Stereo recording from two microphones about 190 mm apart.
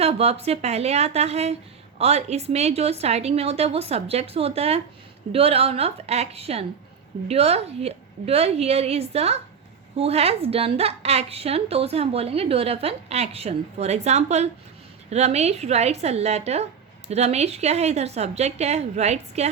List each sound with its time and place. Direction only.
0.0 s a woman's voice: 30° right (ahead or behind)